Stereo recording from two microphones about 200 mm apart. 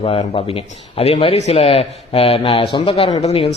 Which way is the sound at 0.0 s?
30° left (ahead or behind).